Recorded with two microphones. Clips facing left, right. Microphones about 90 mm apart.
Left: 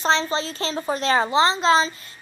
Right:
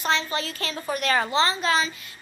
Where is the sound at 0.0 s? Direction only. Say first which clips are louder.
Left 4 dB; 30° left (ahead or behind).